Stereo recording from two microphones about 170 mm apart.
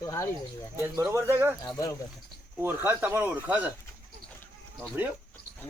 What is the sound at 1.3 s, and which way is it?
Speech, 15° right (ahead or behind).